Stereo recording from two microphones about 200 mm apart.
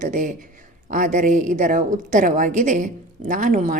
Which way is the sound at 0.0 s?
40° right (ahead or behind).